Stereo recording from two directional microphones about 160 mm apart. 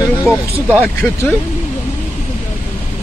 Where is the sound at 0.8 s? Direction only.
10° left (ahead or behind).